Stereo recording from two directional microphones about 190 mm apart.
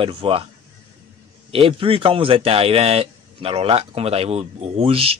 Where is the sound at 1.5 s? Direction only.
30° right (ahead or behind).